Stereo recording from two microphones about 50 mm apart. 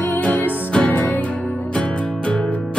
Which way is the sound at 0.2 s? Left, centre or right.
Left.